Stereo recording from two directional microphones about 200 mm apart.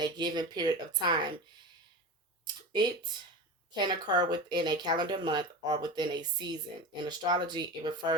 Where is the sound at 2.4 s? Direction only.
20° right (ahead or behind).